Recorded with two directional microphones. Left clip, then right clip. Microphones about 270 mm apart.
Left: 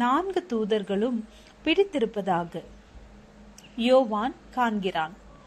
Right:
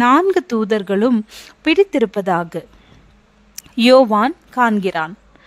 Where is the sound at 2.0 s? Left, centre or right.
Right.